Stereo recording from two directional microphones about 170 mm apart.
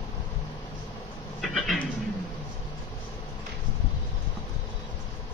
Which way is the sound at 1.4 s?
Centre (ahead or behind).